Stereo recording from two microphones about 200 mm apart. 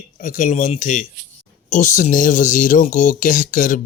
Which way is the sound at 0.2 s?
40° left (ahead or behind).